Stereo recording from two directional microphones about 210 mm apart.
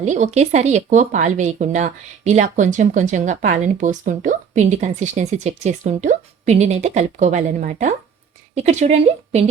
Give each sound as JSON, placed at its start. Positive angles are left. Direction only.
{"t": 0.0, "sound": "speech", "side_deg": -35}